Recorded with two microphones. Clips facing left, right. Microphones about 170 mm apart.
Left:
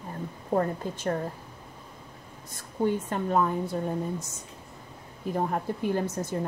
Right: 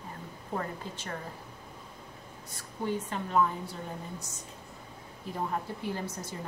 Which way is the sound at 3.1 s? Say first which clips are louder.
Left 3 dB; 50° left (ahead or behind).